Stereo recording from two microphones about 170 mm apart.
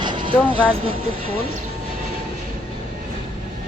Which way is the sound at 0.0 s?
30° right (ahead or behind).